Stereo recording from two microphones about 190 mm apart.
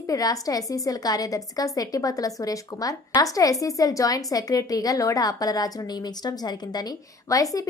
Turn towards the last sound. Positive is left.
turn(degrees=20)  # may be behind; listen again after turning